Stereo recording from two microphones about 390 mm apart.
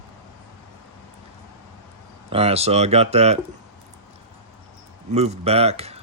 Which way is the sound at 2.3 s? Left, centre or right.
Centre.